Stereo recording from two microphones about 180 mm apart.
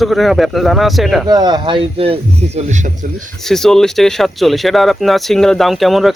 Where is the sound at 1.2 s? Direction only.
25° right (ahead or behind).